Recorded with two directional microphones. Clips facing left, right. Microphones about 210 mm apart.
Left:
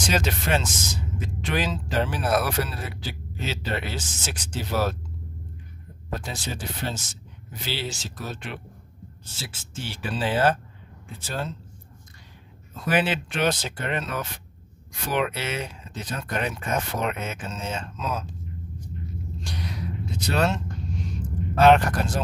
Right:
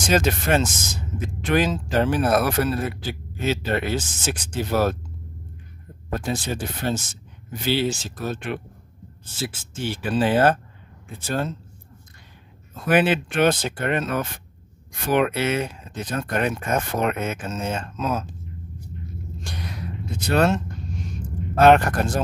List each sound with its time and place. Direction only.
0.1 s a man's voice: 50° right (ahead or behind)
6.1 s a man's voice: 55° right (ahead or behind)
12.8 s a man's voice: 55° right (ahead or behind)
19.4 s a sound: 50° right (ahead or behind)
21.5 s a man's voice: 50° right (ahead or behind)